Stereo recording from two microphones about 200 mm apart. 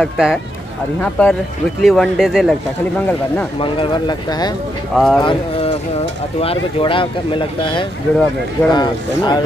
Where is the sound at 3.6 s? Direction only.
25° left (ahead or behind).